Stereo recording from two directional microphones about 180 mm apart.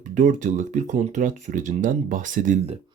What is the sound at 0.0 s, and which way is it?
Speech, 45° right (ahead or behind).